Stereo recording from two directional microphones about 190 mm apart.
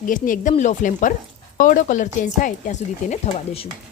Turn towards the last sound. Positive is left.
turn(degrees=35)  # may be behind; listen again after turning